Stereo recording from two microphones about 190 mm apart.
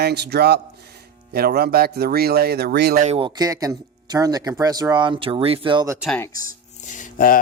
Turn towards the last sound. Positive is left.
turn(degrees=45)  # may be behind; listen again after turning